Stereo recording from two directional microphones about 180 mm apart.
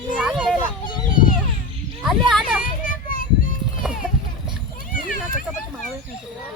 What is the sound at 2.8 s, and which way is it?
Children playing, 50° left (ahead or behind).